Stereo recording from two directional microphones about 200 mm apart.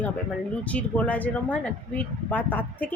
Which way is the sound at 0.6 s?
5° left (ahead or behind).